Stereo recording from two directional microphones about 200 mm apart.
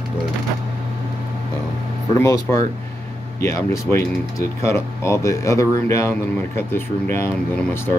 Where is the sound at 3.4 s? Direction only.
15° left (ahead or behind).